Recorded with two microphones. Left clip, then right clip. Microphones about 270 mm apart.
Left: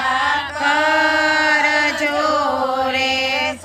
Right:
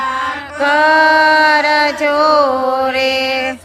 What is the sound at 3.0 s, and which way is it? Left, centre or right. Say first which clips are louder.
Mantra: right 4 dB; right.